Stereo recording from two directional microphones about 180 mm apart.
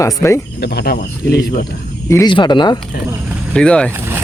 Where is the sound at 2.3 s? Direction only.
25° left (ahead or behind).